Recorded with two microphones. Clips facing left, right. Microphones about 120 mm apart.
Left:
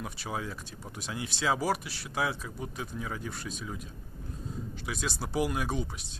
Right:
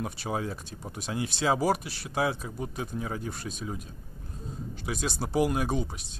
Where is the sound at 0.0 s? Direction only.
35° right (ahead or behind).